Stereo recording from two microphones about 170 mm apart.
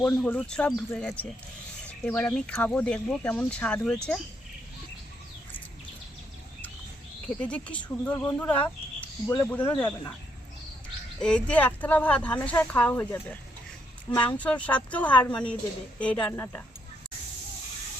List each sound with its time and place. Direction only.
0.0 s speech: 10° left (ahead or behind)
7.4 s speech: 5° left (ahead or behind)
9.0 s a sound: 15° left (ahead or behind)
11.2 s speech: 5° left (ahead or behind)